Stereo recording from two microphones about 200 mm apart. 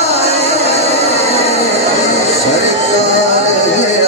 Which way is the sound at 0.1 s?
30° left (ahead or behind).